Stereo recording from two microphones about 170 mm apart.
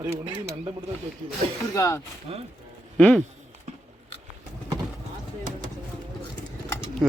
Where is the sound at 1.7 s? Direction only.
20° left (ahead or behind).